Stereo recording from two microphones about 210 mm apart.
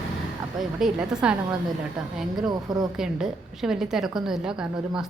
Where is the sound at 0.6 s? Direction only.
Centre (ahead or behind).